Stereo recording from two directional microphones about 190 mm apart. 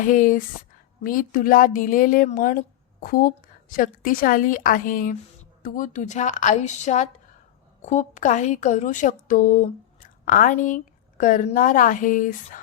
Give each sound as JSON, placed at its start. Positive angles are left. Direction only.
{"t": 0.0, "sound": "speech", "side_deg": 45}